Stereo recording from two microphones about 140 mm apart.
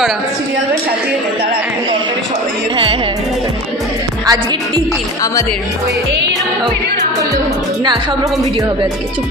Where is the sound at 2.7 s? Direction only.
40° right (ahead or behind).